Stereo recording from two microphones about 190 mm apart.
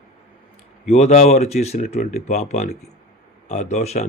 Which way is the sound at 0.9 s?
35° left (ahead or behind).